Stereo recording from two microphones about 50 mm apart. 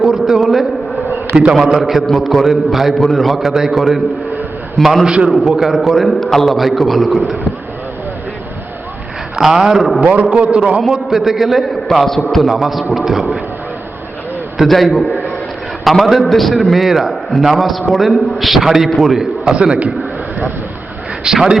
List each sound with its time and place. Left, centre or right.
0.0 s a man's voice: centre
1.8 s a man's voice: centre
5.4 s a man's voice: centre
9.3 s a man's voice: centre
10.0 s a man's voice: right
10.4 s a man's voice: centre
14.6 s a man's voice: centre
19.5 s a man's voice: right
21.2 s speech: centre